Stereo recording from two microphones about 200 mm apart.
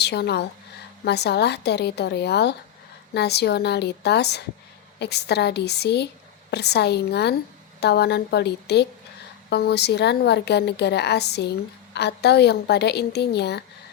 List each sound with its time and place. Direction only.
0.0 s a woman's voice: 55° left (ahead or behind)